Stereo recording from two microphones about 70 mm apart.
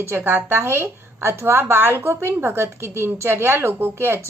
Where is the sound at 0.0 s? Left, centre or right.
Right.